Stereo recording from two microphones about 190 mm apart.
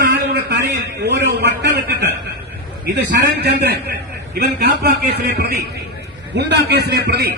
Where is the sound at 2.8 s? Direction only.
65° right (ahead or behind).